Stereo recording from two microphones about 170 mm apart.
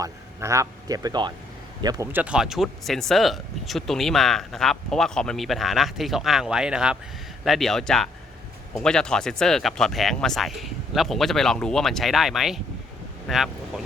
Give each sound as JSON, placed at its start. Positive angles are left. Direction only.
{"t": 0.0, "sound": "a man's voice", "side_deg": -15}
{"t": 2.1, "sound": "speech", "side_deg": -5}